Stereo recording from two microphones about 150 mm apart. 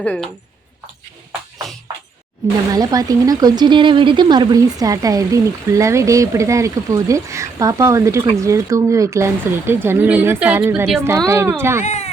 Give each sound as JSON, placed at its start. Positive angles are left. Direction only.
{"t": 0.0, "sound": "speech", "side_deg": 10}
{"t": 2.7, "sound": "speech", "side_deg": -25}
{"t": 11.8, "sound": "speech", "side_deg": 50}